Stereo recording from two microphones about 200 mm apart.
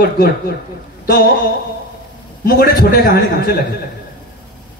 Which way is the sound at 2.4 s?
50° left (ahead or behind).